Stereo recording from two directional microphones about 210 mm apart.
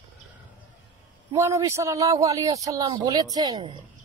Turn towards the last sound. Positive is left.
turn(degrees=-20)  # may be behind; listen again after turning